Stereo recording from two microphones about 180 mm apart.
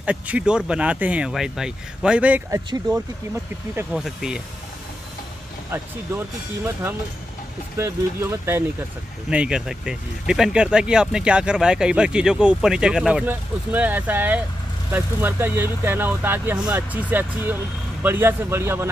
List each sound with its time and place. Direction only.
0.0 s speech: 5° right (ahead or behind)
3.7 s speech: 5° right (ahead or behind)
7.7 s speech: 15° right (ahead or behind)